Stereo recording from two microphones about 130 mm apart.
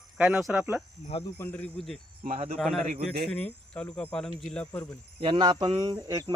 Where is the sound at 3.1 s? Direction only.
5° left (ahead or behind).